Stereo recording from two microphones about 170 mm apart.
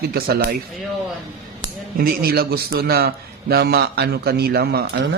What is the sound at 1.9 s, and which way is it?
A man's voice, 60° right (ahead or behind).